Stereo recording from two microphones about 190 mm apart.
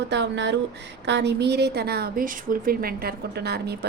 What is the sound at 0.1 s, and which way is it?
A woman's voice, 65° right (ahead or behind).